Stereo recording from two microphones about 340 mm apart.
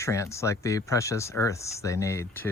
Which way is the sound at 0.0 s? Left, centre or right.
Centre.